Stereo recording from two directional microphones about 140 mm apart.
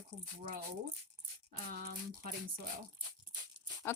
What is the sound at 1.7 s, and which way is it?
Speech, 90° right.